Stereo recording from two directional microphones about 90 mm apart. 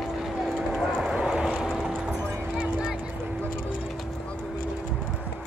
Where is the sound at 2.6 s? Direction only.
10° right (ahead or behind).